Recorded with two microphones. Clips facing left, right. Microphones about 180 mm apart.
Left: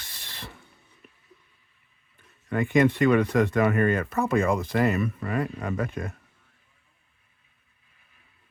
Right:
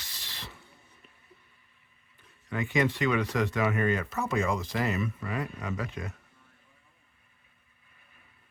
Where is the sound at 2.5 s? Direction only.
50° left (ahead or behind).